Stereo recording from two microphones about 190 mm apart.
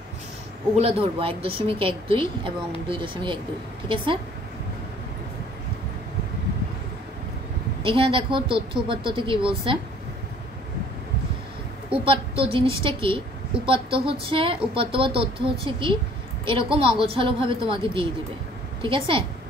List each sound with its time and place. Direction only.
0.7 s speech: 30° right (ahead or behind)
7.8 s speech: 25° right (ahead or behind)
12.0 s speech: 30° right (ahead or behind)